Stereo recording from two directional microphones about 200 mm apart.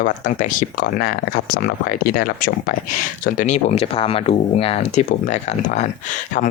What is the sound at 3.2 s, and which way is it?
Speech, 35° left (ahead or behind).